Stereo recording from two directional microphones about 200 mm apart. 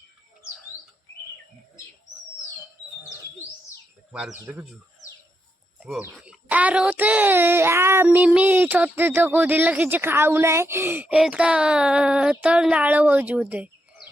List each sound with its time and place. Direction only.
4.1 s speech: 5° right (ahead or behind)
5.8 s a child's voice: 5° right (ahead or behind)